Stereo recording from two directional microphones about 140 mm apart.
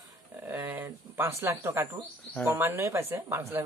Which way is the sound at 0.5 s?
20° right (ahead or behind).